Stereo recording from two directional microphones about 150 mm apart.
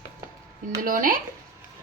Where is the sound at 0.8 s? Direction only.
65° right (ahead or behind).